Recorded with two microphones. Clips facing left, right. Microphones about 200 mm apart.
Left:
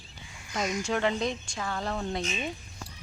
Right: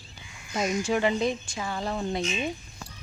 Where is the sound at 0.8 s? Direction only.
5° right (ahead or behind).